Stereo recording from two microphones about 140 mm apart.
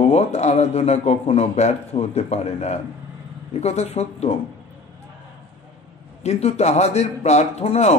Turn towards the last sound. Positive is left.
turn(degrees=50)  # may be behind; listen again after turning